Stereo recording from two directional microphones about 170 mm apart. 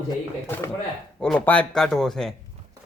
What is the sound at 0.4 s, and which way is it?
Speech, 15° left (ahead or behind).